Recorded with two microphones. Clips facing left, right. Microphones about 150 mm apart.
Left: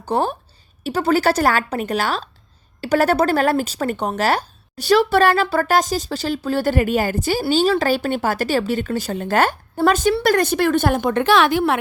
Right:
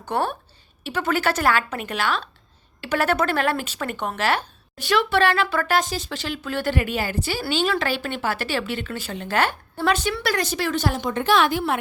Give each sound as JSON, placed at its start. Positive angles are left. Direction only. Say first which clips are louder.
{"t": 0.0, "sound": "speech", "louder": "left 4 dB", "side_deg": 30}